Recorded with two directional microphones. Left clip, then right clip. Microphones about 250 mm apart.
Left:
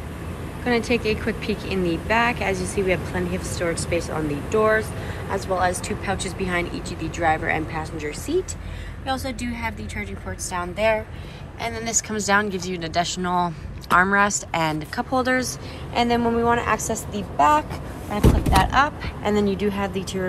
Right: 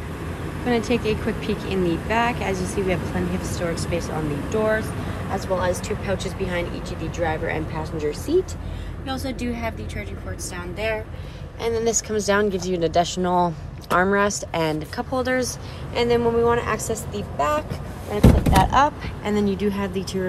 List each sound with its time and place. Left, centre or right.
0.7 s speech: centre